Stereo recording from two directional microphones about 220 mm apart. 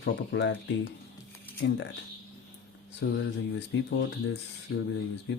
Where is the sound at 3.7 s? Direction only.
50° left (ahead or behind).